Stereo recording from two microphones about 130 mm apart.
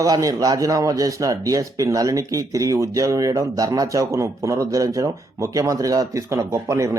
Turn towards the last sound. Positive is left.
turn(degrees=-25)  # may be behind; listen again after turning